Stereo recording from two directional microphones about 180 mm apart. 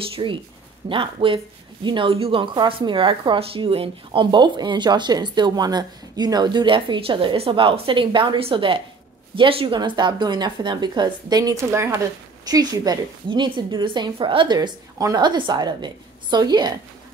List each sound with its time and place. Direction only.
0.1 s a woman's voice: 30° right (ahead or behind)